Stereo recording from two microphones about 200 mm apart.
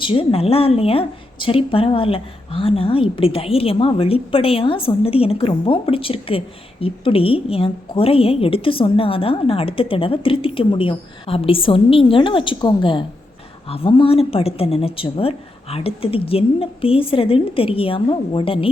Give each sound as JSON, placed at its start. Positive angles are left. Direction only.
{"t": 0.0, "sound": "a woman's voice", "side_deg": 25}